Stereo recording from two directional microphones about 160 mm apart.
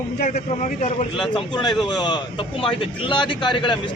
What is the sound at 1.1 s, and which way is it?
Speech, 5° left (ahead or behind).